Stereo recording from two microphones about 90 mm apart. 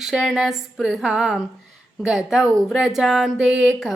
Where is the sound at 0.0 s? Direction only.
5° right (ahead or behind).